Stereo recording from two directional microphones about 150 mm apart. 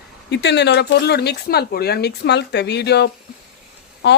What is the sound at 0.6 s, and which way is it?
Speech, 90° left.